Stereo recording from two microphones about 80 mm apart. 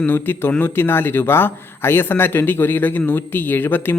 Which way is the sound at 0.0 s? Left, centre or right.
Left.